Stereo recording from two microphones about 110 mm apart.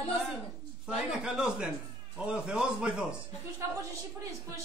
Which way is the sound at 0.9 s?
5° right (ahead or behind).